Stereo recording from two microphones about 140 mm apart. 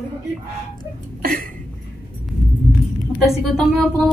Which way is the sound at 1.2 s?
90° right.